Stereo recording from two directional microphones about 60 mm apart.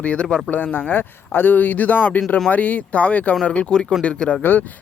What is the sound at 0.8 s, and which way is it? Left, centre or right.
Speech, left.